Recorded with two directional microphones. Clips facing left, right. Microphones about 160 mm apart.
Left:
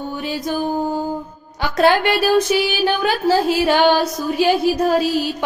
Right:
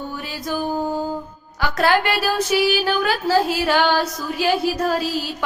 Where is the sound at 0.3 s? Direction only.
20° left (ahead or behind).